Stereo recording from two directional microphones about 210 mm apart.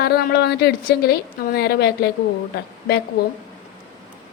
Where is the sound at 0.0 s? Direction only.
45° left (ahead or behind).